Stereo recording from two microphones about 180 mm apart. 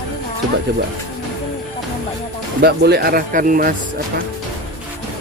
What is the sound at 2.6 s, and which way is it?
Speech, 60° right (ahead or behind).